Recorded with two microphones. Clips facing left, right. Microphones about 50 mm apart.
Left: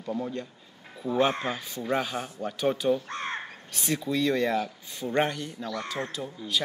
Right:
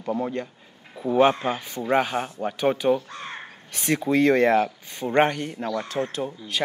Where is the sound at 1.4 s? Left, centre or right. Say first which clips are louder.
Right 5 dB; right.